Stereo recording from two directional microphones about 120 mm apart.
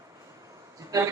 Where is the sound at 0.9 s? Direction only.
30° right (ahead or behind).